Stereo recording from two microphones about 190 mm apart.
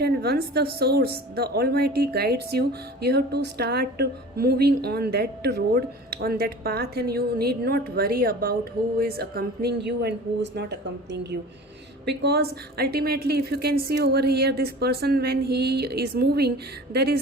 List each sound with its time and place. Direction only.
0.0 s a woman's voice: 55° right (ahead or behind)